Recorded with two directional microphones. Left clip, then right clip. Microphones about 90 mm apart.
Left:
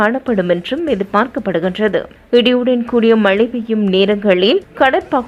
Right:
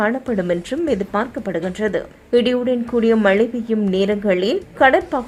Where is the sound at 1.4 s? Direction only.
20° left (ahead or behind).